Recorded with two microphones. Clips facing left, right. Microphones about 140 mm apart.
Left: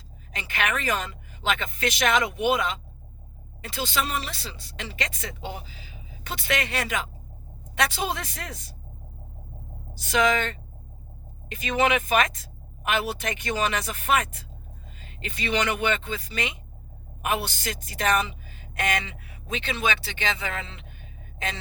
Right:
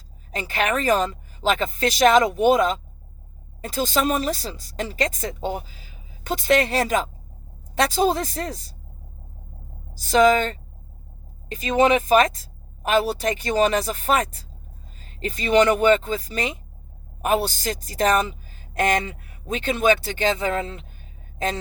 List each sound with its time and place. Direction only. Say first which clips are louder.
0.3 s speech: right 5 dB; 35° right (ahead or behind)
9.9 s a woman's voice: right 7 dB; 35° right (ahead or behind)